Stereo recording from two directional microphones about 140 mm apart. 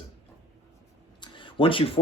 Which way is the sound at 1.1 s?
35° left (ahead or behind).